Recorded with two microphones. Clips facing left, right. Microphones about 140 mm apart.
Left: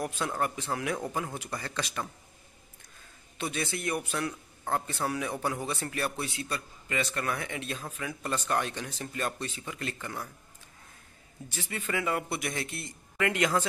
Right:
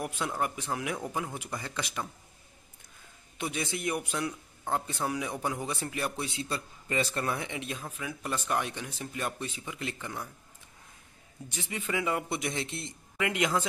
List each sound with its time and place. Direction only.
0.0 s speech: 15° right (ahead or behind)
3.3 s speech: 15° right (ahead or behind)
11.4 s speech: 15° right (ahead or behind)